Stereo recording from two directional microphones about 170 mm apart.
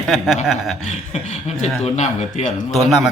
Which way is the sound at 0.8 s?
40° left (ahead or behind).